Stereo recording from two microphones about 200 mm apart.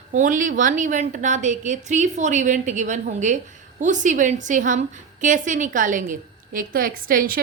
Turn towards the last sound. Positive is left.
turn(degrees=-45)  # may be behind; listen again after turning